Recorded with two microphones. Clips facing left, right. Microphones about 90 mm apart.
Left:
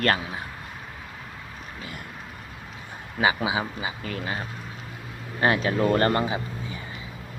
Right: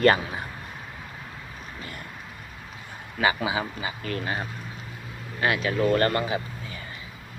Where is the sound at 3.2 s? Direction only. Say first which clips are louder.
Left 1 dB; 15° left (ahead or behind).